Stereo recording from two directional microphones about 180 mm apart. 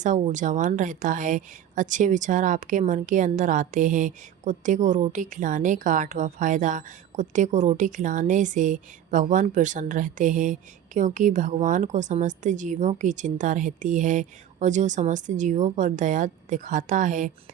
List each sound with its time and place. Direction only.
0.0 s a woman's voice: 45° right (ahead or behind)